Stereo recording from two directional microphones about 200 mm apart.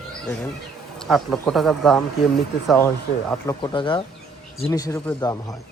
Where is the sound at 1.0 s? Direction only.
Centre (ahead or behind).